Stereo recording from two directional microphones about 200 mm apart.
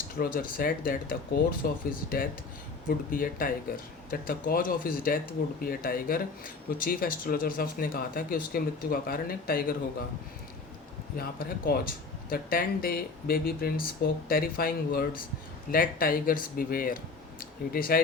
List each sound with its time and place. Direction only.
0.2 s speech: 45° left (ahead or behind)
11.2 s speech: 50° left (ahead or behind)